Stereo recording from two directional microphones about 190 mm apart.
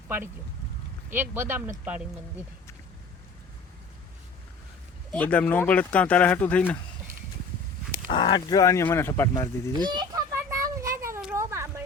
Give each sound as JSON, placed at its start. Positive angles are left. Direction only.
{"t": 1.1, "sound": "speech", "side_deg": -10}
{"t": 5.1, "sound": "speech", "side_deg": 5}
{"t": 8.1, "sound": "speech", "side_deg": 25}
{"t": 9.7, "sound": "children playing", "side_deg": -20}
{"t": 11.2, "sound": "a sound", "side_deg": -10}